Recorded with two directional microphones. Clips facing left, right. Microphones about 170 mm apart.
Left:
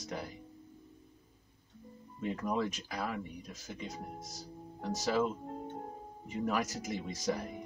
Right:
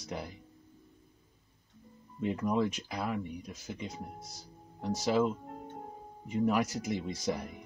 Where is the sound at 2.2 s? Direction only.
15° right (ahead or behind).